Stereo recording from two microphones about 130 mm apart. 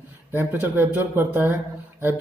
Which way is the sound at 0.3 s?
15° right (ahead or behind).